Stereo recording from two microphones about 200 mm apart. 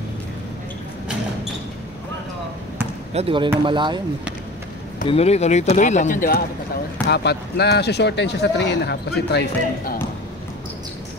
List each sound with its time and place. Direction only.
3.1 s speech: 30° right (ahead or behind)
5.0 s speech: 30° left (ahead or behind)
7.1 s speech: 55° left (ahead or behind)